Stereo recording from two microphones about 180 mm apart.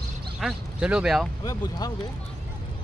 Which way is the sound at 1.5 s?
20° left (ahead or behind).